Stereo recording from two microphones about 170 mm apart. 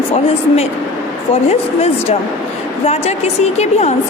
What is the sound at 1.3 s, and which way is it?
A woman's voice, 35° left (ahead or behind).